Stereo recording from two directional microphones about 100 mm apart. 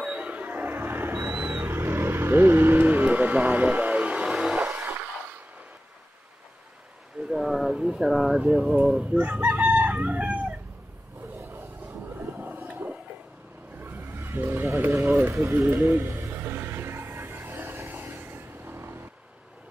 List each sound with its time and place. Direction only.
0.0 s music: 10° right (ahead or behind)
7.2 s a sound: 5° right (ahead or behind)
11.3 s vehicle: 20° right (ahead or behind)
12.2 s whale vocalization: 20° right (ahead or behind)
13.7 s vehicle: 20° right (ahead or behind)